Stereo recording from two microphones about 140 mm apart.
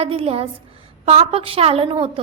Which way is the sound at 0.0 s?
45° right (ahead or behind).